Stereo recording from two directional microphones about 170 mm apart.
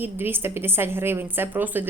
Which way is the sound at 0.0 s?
10° right (ahead or behind).